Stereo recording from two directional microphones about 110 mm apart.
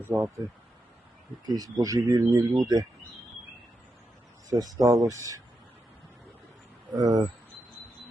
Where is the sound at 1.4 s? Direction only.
35° right (ahead or behind).